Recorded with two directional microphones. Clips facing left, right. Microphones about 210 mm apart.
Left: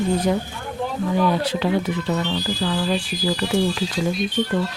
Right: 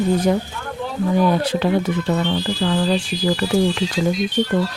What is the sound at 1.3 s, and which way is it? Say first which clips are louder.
Speech: right 3 dB; 50° right (ahead or behind).